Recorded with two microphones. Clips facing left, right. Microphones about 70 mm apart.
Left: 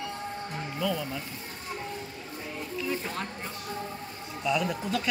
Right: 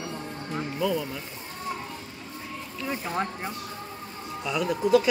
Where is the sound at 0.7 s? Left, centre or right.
Centre.